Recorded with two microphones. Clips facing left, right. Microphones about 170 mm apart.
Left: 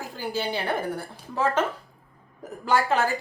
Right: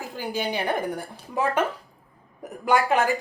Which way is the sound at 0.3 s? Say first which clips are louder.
Right 1 dB; 15° right (ahead or behind).